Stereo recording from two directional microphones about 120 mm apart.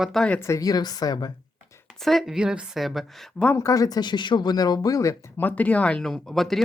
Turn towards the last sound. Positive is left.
turn(degrees=0)  # may be behind; listen again after turning